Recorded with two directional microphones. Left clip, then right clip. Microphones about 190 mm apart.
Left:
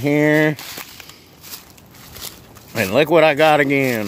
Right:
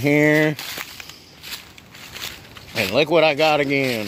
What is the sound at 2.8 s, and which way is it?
Speech, 15° left (ahead or behind).